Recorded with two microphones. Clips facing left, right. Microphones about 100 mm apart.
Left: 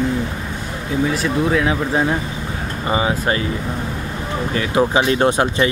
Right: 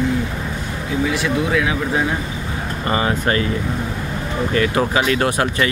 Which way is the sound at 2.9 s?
15° left (ahead or behind).